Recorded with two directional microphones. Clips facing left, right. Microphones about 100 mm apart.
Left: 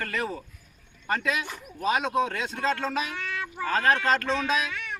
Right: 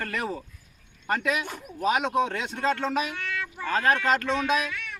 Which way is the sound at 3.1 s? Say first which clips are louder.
Even; 20° left (ahead or behind).